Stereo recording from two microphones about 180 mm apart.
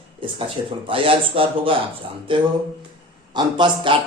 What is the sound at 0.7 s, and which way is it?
Speech, 30° right (ahead or behind).